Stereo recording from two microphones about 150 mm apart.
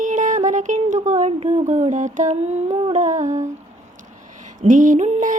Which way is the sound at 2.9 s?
55° right (ahead or behind).